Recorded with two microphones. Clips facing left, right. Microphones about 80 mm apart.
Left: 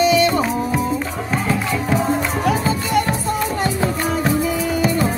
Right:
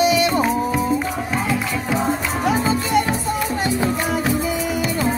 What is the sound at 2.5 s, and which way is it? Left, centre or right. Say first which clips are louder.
Music: right 2 dB; right.